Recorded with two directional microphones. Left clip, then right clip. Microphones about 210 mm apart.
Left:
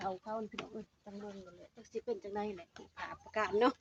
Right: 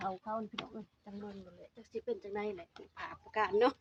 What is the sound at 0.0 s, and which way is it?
Speech, 35° right (ahead or behind).